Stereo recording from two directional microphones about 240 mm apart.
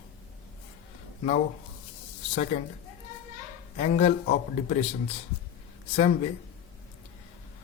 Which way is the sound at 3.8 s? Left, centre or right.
Left.